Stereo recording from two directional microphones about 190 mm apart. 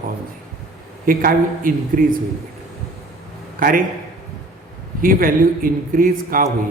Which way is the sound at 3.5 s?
45° right (ahead or behind).